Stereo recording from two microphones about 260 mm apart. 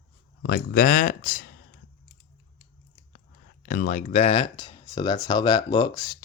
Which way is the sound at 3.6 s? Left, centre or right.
Left.